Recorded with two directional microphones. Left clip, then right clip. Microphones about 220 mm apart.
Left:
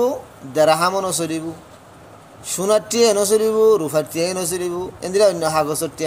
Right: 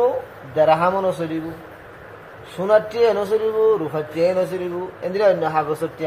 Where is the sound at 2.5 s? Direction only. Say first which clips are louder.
Even; 60° left (ahead or behind).